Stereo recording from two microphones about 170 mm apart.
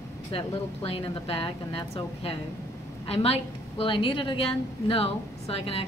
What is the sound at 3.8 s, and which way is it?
A woman's voice, 30° left (ahead or behind).